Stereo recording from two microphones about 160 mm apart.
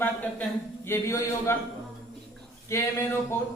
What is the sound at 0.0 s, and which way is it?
Speech, 10° left (ahead or behind).